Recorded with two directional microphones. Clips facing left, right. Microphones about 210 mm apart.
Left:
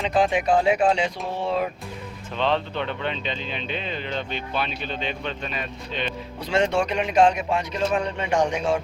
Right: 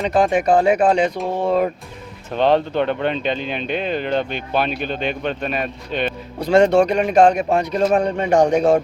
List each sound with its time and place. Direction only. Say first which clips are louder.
0.0 s speech: right 4 dB; 50° right (ahead or behind)
6.5 s speech: right 9 dB; 40° right (ahead or behind)